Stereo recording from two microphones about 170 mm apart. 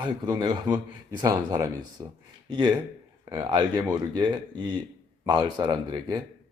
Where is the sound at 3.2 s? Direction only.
25° right (ahead or behind).